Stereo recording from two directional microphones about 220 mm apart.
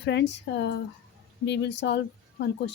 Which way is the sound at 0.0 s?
55° left (ahead or behind).